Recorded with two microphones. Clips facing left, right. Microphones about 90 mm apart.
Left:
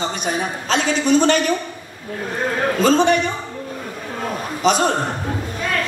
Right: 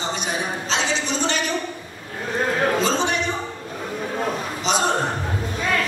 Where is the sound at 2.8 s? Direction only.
50° left (ahead or behind).